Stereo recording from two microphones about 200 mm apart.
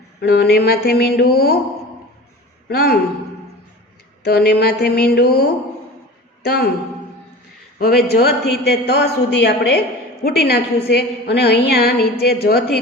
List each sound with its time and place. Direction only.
0.2 s a man's voice: 55° left (ahead or behind)
2.6 s a man's voice: 50° left (ahead or behind)
4.3 s a man's voice: 50° left (ahead or behind)
7.8 s a man's voice: 50° left (ahead or behind)